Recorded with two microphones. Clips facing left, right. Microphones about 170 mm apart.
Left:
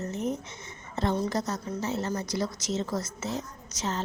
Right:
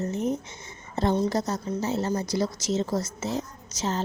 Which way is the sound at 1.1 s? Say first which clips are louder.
Right 4 dB; 25° right (ahead or behind).